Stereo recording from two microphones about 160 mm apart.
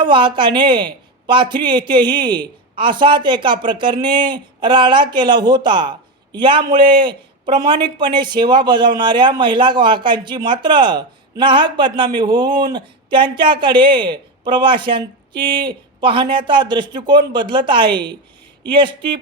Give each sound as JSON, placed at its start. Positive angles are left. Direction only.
{"t": 0.0, "sound": "a man's voice", "side_deg": -30}